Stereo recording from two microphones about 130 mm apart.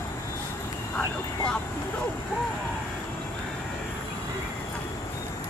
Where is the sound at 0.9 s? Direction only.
5° left (ahead or behind).